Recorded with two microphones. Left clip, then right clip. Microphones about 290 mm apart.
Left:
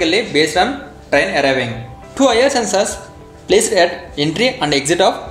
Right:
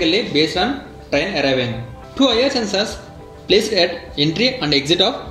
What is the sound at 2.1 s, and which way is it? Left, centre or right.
Speech, left.